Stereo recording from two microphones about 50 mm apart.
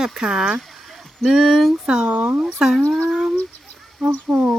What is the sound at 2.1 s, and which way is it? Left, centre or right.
Speech, right.